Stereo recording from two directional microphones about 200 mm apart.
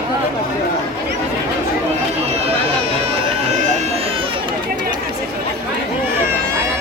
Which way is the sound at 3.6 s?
35° right (ahead or behind).